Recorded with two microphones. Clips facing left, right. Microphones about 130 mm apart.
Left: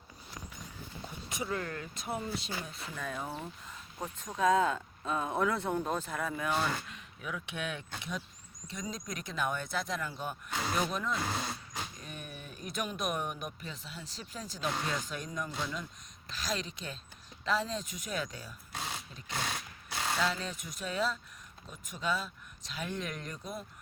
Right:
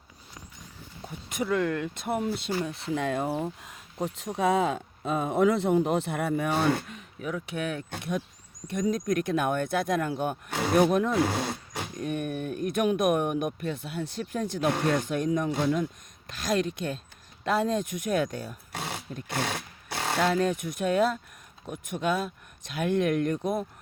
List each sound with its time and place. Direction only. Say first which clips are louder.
1.3 s speech: right 10 dB; 65° right (ahead or behind)